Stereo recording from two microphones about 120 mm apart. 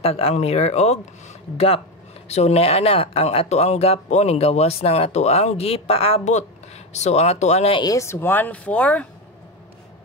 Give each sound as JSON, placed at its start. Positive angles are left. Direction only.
{"t": 0.0, "sound": "speech", "side_deg": 55}
{"t": 2.2, "sound": "speech", "side_deg": 65}
{"t": 7.7, "sound": "speech", "side_deg": 30}